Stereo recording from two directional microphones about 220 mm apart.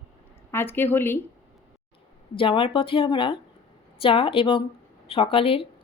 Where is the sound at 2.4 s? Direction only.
25° left (ahead or behind).